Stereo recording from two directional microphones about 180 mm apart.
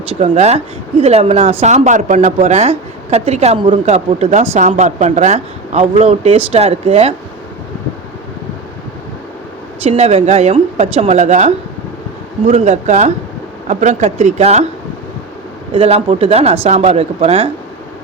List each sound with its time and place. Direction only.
0.1 s a woman's voice: 35° right (ahead or behind)
9.8 s a woman's voice: 35° right (ahead or behind)
15.7 s a woman's voice: 30° right (ahead or behind)